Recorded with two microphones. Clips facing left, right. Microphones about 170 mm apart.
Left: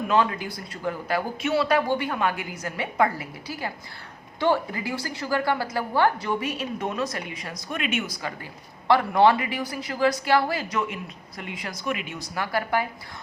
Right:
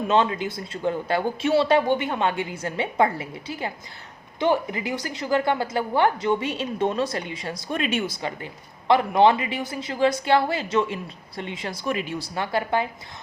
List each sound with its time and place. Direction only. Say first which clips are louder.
0.1 s a woman's voice: right 2 dB; 25° right (ahead or behind)